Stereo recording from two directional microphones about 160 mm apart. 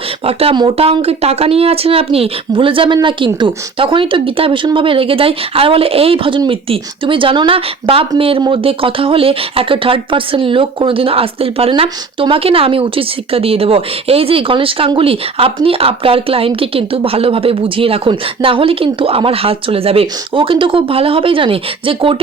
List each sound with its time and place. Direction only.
0.3 s speech: 35° right (ahead or behind)